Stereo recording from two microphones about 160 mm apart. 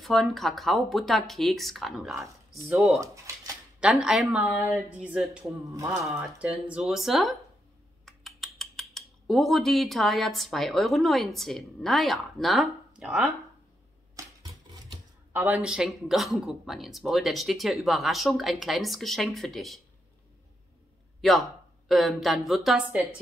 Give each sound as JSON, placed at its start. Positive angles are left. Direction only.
{"t": 0.0, "sound": "a man's voice", "side_deg": 0}
{"t": 3.0, "sound": "speech", "side_deg": -20}
{"t": 3.8, "sound": "a man's voice", "side_deg": -5}
{"t": 5.7, "sound": "speech", "side_deg": -20}
{"t": 6.4, "sound": "a man's voice", "side_deg": -5}
{"t": 8.0, "sound": "cutlery", "side_deg": 0}
{"t": 15.3, "sound": "a man's voice", "side_deg": -10}
{"t": 21.2, "sound": "speech", "side_deg": 0}